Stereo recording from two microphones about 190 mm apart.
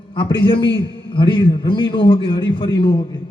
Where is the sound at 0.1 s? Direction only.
25° left (ahead or behind).